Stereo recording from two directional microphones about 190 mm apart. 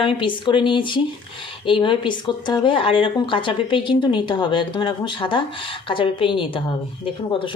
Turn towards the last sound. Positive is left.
turn(degrees=25)  # may be behind; listen again after turning